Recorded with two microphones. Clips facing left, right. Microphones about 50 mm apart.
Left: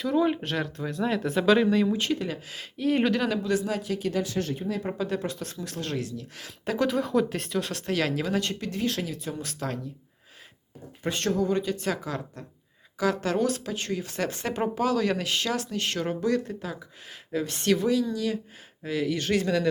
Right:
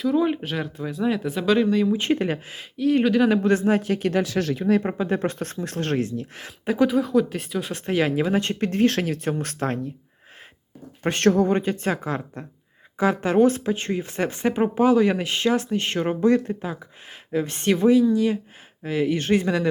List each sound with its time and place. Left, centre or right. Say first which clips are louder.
0.0 s speech: right 3 dB; centre
2.1 s speech: right 7 dB; right
2.7 s speech: right 5 dB; centre
3.4 s speech: right 7 dB; right
4.2 s speech: right 5 dB; right
4.9 s speech: right 5 dB; right
6.1 s speech: right 6 dB; right
6.7 s speech: right 5 dB; centre
7.7 s speech: right 8 dB; right
11.0 s speech: right 7 dB; right